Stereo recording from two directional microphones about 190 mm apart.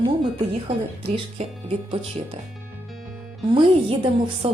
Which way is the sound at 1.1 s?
30° right (ahead or behind).